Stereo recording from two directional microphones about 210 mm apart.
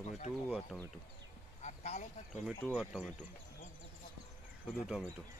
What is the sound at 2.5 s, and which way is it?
Speech, 5° left (ahead or behind).